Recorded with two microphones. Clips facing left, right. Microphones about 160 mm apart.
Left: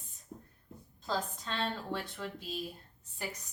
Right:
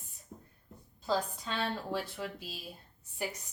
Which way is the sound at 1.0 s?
5° right (ahead or behind).